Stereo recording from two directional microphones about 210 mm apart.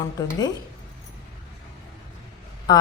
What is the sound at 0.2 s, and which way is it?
Cutlery, 15° left (ahead or behind).